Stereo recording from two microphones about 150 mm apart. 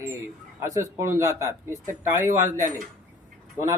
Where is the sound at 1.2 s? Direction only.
20° right (ahead or behind).